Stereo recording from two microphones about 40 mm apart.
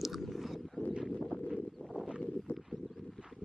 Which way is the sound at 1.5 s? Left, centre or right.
Centre.